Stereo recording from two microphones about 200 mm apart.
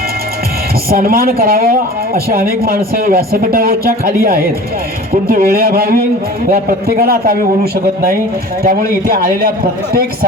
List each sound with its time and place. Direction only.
0.9 s speech: 45° right (ahead or behind)